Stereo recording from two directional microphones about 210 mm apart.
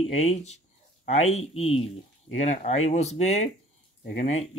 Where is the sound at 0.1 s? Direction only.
30° left (ahead or behind).